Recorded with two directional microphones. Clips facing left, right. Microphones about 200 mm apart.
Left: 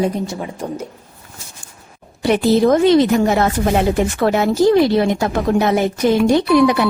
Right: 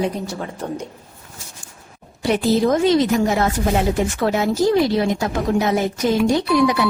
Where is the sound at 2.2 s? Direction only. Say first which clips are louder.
Left 4 dB; 65° left (ahead or behind).